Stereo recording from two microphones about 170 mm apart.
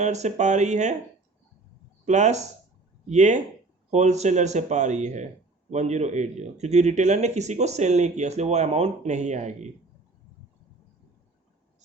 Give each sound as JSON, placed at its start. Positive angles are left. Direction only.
{"t": 0.0, "sound": "a man's voice", "side_deg": -40}
{"t": 2.0, "sound": "a man's voice", "side_deg": -45}